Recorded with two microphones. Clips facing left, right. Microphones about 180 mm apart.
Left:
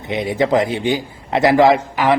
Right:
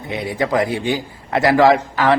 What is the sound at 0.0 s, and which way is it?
A man's voice, 20° left (ahead or behind).